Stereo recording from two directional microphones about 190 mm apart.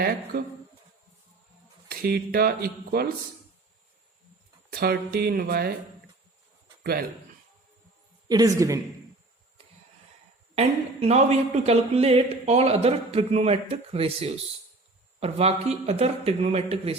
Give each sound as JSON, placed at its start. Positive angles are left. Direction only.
{"t": 1.9, "sound": "speech", "side_deg": -55}
{"t": 4.7, "sound": "speech", "side_deg": -55}
{"t": 8.3, "sound": "speech", "side_deg": -20}
{"t": 10.5, "sound": "speech", "side_deg": -35}